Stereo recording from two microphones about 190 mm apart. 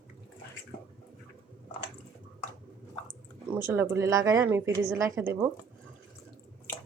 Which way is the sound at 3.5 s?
10° right (ahead or behind).